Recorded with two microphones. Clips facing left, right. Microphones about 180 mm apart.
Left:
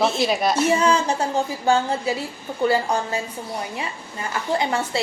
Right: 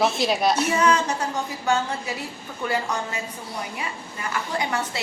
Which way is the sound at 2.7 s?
30° left (ahead or behind).